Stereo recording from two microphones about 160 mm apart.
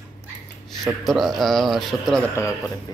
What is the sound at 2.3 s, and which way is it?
Speech, 20° left (ahead or behind).